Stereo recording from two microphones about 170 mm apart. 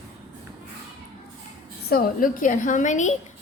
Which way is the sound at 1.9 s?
60° left (ahead or behind).